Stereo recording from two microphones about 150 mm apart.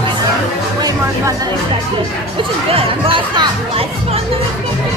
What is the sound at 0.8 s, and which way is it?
Speech, 25° right (ahead or behind).